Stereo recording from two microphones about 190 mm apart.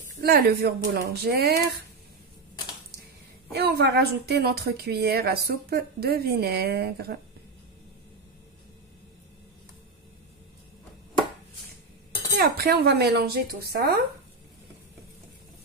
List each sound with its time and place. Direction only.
0.2 s a woman's voice: 55° right (ahead or behind)
3.5 s a woman's voice: 60° right (ahead or behind)
12.3 s a woman's voice: 55° right (ahead or behind)